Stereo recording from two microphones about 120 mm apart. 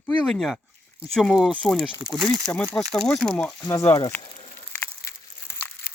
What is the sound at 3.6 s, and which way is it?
Speech, 30° left (ahead or behind).